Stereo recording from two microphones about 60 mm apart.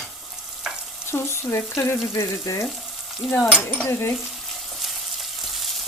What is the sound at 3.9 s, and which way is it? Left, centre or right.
Frying, left.